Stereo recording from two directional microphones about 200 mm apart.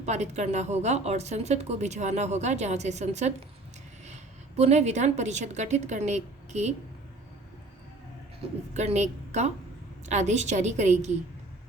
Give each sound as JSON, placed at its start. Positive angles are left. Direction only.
{"t": 0.0, "sound": "a woman's voice", "side_deg": -35}
{"t": 4.5, "sound": "a woman's voice", "side_deg": -30}
{"t": 8.7, "sound": "a woman's voice", "side_deg": -35}